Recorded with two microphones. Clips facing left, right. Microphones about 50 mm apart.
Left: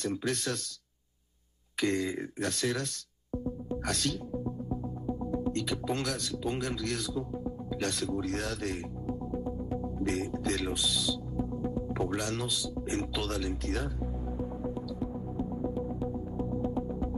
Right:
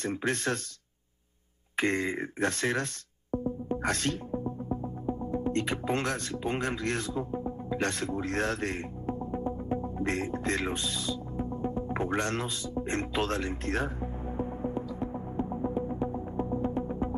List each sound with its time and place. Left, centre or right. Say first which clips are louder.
0.0 s speech: right 2 dB; right
1.8 s speech: right 2 dB; right
14.3 s music: right 4 dB; right